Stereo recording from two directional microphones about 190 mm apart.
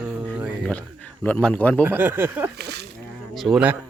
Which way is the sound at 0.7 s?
5° left (ahead or behind).